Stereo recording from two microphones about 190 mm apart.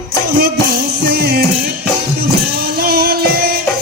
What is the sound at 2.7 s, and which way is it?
Music, 55° right (ahead or behind).